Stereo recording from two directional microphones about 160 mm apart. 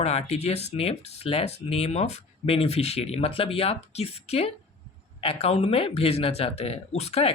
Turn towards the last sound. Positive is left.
turn(degrees=40)  # may be behind; listen again after turning